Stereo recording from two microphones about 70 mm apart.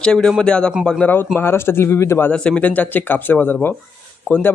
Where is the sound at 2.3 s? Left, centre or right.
Centre.